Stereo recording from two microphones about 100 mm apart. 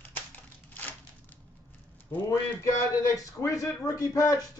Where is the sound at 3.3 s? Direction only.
30° left (ahead or behind).